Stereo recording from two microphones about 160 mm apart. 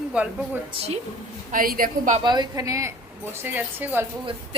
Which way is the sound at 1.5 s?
60° right (ahead or behind).